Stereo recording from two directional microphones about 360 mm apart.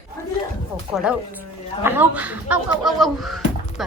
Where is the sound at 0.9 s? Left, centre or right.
Centre.